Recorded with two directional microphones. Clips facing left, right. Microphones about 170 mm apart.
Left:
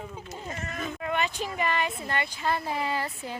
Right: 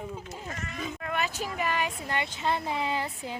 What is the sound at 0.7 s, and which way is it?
Sheep, 50° left (ahead or behind).